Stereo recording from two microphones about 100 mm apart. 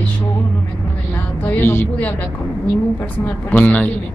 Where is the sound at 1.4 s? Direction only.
20° left (ahead or behind).